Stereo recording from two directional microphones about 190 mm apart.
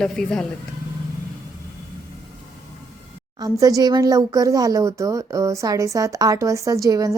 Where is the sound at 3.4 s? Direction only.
20° right (ahead or behind).